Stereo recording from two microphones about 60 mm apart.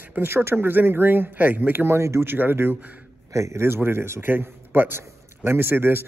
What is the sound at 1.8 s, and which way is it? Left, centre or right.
Speech, right.